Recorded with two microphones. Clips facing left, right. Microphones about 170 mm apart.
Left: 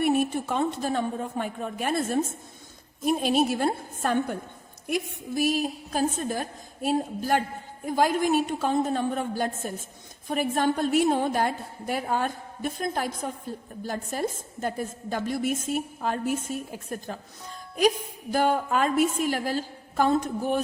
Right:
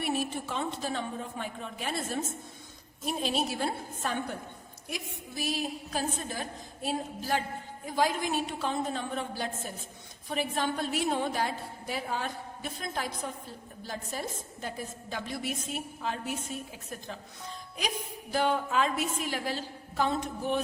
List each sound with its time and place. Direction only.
0.0 s a woman's voice: 50° left (ahead or behind)